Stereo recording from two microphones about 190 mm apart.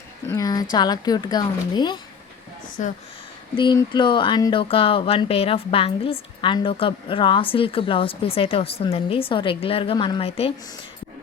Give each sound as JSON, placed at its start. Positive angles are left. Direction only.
{"t": 0.3, "sound": "speech", "side_deg": 20}
{"t": 2.8, "sound": "speech", "side_deg": 40}
{"t": 3.5, "sound": "speech", "side_deg": 25}